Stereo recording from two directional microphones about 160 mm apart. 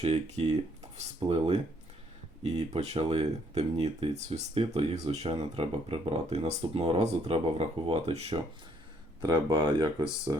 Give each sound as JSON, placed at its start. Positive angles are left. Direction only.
{"t": 0.0, "sound": "speech", "side_deg": -40}